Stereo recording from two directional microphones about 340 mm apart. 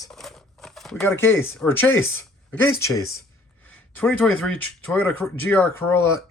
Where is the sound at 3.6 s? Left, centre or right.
Centre.